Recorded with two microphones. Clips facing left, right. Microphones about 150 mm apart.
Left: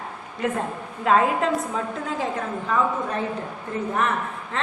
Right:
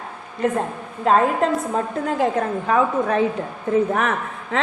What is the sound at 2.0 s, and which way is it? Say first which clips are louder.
A woman's voice: right 7 dB; 65° right (ahead or behind).